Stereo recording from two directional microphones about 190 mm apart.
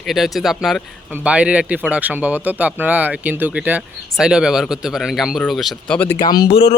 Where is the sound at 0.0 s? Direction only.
Centre (ahead or behind).